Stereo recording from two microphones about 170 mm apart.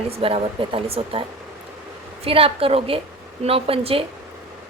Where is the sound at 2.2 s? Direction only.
35° right (ahead or behind).